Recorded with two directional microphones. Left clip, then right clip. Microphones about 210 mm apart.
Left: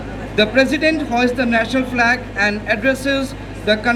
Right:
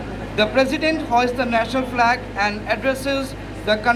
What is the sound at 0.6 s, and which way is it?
A woman's voice, 25° left (ahead or behind).